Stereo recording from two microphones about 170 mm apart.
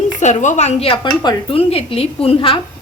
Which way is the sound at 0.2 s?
45° left (ahead or behind).